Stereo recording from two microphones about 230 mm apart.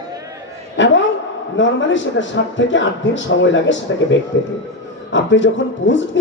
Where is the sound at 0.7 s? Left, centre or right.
Left.